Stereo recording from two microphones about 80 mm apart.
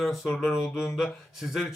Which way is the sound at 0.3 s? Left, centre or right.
Centre.